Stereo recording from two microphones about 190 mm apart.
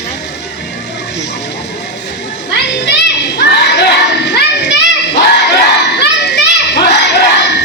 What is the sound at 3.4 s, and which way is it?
Crowd, 60° left (ahead or behind).